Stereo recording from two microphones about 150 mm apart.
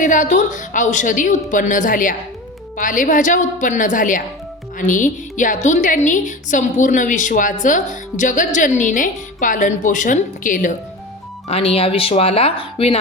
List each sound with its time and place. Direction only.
0.0 s a woman's voice: 55° left (ahead or behind)
11.4 s speech: 40° left (ahead or behind)